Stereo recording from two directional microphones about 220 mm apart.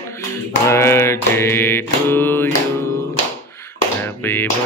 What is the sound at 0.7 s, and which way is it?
Mantra, 10° left (ahead or behind).